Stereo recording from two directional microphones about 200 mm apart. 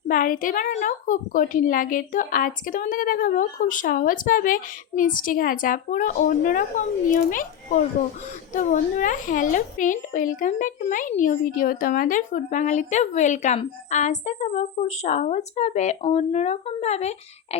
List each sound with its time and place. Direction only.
0.1 s a woman's voice: 45° left (ahead or behind)